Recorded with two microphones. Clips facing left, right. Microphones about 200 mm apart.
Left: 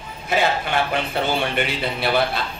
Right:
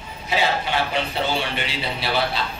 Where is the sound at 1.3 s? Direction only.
55° left (ahead or behind).